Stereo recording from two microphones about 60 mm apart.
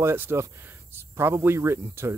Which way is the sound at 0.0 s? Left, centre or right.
Right.